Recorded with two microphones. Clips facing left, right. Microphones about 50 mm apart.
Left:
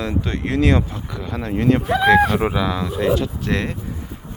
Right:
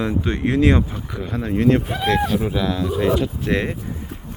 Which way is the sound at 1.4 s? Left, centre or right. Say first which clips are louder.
Right 1 dB; centre.